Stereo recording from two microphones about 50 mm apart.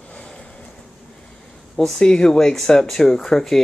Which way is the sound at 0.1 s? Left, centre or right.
Centre.